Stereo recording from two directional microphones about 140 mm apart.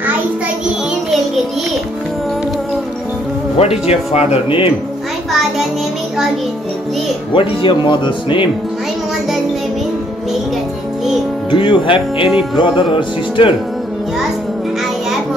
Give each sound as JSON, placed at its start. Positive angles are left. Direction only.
{"t": 3.5, "sound": "speech", "side_deg": 45}
{"t": 7.3, "sound": "speech", "side_deg": 35}
{"t": 11.5, "sound": "speech", "side_deg": 35}